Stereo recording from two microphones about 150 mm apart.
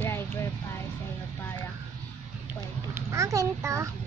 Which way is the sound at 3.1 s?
20° right (ahead or behind).